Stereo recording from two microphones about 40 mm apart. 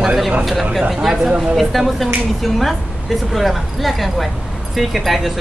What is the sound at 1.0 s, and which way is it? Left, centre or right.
Speech, centre.